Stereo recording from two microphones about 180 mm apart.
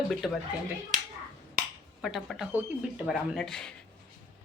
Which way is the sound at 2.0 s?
Centre (ahead or behind).